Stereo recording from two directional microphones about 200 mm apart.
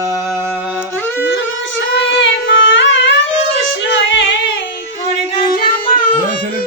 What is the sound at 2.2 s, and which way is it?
Singing, 70° left (ahead or behind).